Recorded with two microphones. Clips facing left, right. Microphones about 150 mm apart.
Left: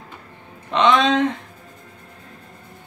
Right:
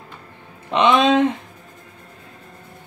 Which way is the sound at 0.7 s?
10° right (ahead or behind).